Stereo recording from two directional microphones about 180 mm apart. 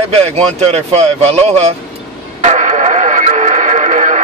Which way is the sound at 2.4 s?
40° right (ahead or behind).